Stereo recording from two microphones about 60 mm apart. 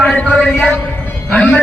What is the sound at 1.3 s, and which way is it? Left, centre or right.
Speech, centre.